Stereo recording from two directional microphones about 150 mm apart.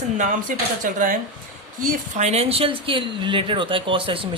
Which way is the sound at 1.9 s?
50° right (ahead or behind).